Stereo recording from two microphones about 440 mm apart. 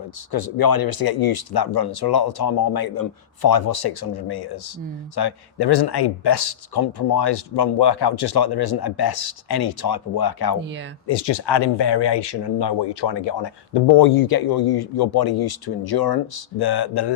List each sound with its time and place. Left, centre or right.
0.3 s speech: left